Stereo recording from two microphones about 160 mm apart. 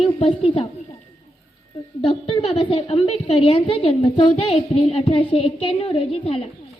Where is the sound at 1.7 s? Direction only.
40° left (ahead or behind).